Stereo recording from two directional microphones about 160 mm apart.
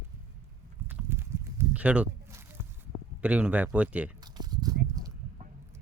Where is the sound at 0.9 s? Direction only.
15° right (ahead or behind).